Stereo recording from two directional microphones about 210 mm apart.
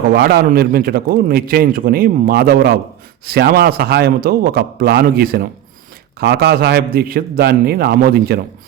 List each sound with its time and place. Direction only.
0.1 s a man's voice: 50° right (ahead or behind)